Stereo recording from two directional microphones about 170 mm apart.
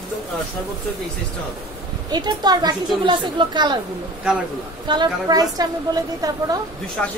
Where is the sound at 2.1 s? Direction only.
25° right (ahead or behind).